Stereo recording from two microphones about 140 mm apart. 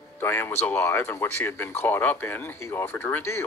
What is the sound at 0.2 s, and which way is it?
Speech, 15° left (ahead or behind).